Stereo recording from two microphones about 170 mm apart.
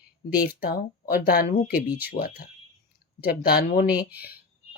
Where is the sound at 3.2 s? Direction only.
65° left (ahead or behind).